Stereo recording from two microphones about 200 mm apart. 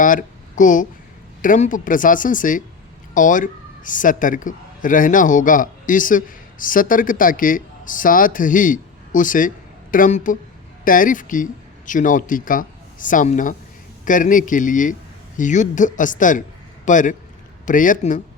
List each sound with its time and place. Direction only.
0.0 s a woman's voice: 40° left (ahead or behind)